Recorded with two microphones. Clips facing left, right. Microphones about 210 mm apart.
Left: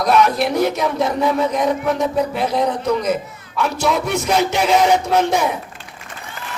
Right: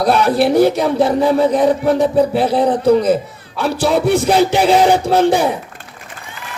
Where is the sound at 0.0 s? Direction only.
35° right (ahead or behind).